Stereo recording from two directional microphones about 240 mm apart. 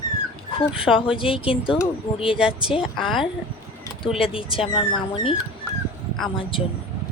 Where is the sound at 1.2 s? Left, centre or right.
Left.